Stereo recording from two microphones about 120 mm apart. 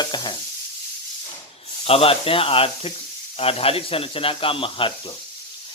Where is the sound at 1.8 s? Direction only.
55° left (ahead or behind).